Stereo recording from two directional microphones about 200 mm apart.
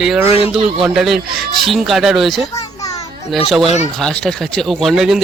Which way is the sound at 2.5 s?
15° left (ahead or behind).